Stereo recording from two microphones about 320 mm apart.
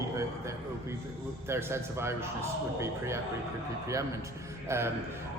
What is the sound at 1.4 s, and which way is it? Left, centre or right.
Speech, centre.